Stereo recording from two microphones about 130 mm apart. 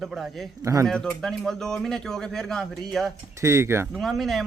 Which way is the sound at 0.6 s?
25° right (ahead or behind).